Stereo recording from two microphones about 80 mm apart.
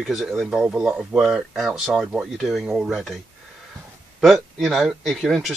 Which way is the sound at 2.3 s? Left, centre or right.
Centre.